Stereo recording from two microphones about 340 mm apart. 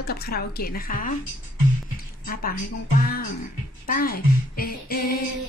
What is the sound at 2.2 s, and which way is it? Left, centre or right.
Speech, left.